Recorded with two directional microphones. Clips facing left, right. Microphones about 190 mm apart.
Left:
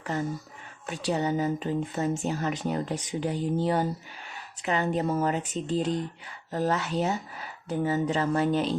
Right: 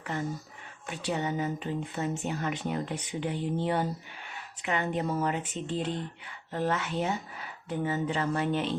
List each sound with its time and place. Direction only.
0.9 s speech: 40° left (ahead or behind)